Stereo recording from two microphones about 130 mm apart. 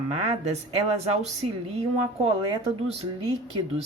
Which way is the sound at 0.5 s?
60° right (ahead or behind).